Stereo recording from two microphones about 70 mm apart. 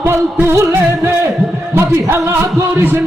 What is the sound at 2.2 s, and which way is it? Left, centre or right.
Music, right.